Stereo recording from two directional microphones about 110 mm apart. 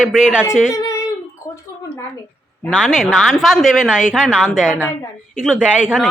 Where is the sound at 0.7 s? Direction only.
30° left (ahead or behind).